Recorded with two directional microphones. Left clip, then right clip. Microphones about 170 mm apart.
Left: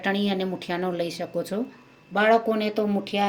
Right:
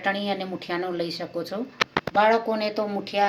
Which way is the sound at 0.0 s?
65° left (ahead or behind).